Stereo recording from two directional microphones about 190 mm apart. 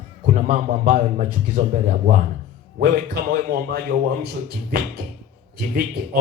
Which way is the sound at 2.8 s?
55° right (ahead or behind).